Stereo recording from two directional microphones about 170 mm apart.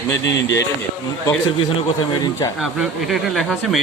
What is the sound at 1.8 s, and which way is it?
Speech, 25° left (ahead or behind).